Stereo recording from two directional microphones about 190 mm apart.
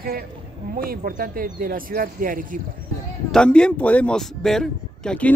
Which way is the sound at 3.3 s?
5° left (ahead or behind).